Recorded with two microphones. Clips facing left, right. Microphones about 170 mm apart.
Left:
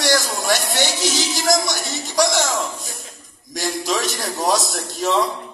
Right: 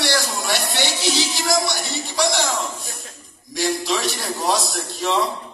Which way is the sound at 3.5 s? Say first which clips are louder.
Right 1 dB; 45° left (ahead or behind).